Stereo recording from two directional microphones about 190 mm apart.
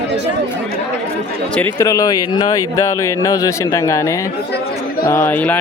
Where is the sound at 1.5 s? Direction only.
15° left (ahead or behind).